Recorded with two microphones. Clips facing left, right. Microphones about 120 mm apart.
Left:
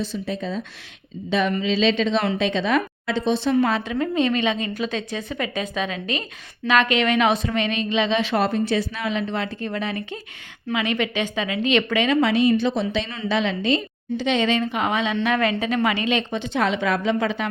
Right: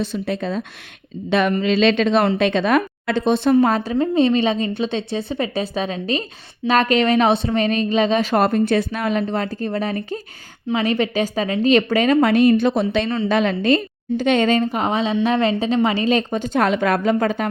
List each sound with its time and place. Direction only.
0.0 s a woman's voice: 65° right (ahead or behind)
3.5 s speech: 40° right (ahead or behind)
3.9 s a woman's voice: 30° right (ahead or behind)